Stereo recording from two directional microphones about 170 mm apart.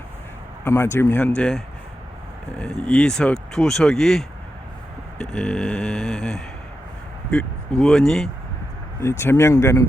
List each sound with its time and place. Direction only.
0.6 s speech: 15° left (ahead or behind)
9.0 s speech: 15° left (ahead or behind)